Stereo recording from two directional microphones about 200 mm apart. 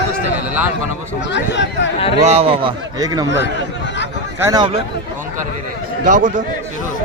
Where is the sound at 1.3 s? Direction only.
60° left (ahead or behind).